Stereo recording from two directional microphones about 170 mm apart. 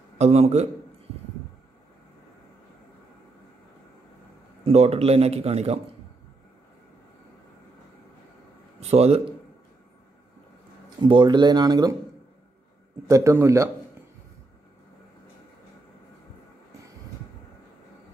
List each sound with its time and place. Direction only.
0.2 s a man's voice: 40° right (ahead or behind)
4.6 s a man's voice: 35° right (ahead or behind)
8.9 s a man's voice: 35° right (ahead or behind)
11.0 s speech: 25° right (ahead or behind)
13.0 s a man's voice: 20° right (ahead or behind)